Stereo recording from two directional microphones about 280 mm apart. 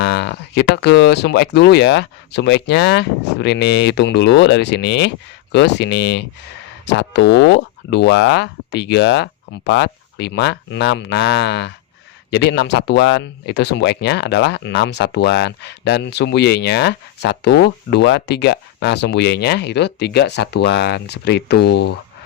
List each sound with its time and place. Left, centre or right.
0.0 s speech: left